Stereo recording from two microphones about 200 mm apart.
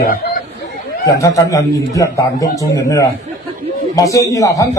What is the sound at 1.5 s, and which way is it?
A man's voice, 15° left (ahead or behind).